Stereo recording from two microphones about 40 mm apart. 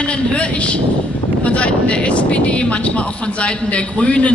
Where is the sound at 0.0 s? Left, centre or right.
Left.